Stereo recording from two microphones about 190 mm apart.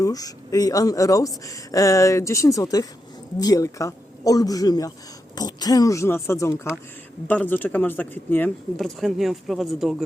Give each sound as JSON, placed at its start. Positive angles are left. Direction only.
{"t": 0.0, "sound": "speech", "side_deg": 20}
{"t": 8.7, "sound": "speech", "side_deg": 0}